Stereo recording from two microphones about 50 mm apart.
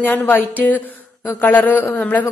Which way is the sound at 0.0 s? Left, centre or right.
Left.